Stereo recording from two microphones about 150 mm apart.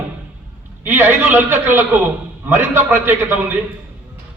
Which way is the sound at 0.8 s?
15° right (ahead or behind).